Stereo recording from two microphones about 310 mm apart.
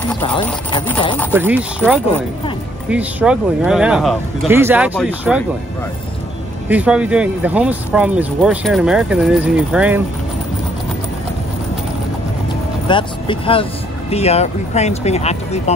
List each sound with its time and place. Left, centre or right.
0.7 s speech: centre
1.3 s speech: centre
2.9 s speech: centre
6.7 s speech: centre
12.8 s speech: centre